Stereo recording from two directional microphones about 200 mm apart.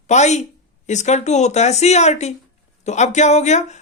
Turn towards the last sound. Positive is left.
turn(degrees=35)  # may be behind; listen again after turning